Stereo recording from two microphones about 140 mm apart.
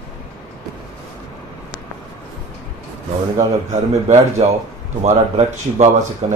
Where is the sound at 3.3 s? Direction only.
55° right (ahead or behind).